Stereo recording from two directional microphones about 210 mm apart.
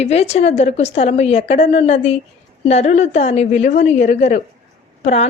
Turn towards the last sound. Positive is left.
turn(degrees=30)  # may be behind; listen again after turning